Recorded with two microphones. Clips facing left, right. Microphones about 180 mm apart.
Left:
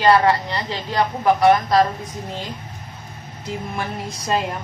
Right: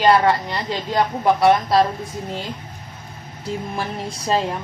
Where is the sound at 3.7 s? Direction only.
30° right (ahead or behind).